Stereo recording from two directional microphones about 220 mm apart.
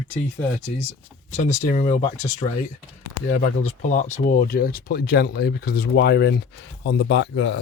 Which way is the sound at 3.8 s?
35° left (ahead or behind).